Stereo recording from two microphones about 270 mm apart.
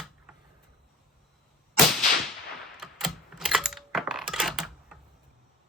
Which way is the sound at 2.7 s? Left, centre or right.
Centre.